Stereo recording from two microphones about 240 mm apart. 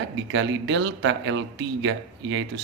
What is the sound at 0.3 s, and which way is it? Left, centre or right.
Speech, right.